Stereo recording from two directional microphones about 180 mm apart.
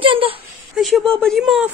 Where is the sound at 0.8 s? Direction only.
Centre (ahead or behind).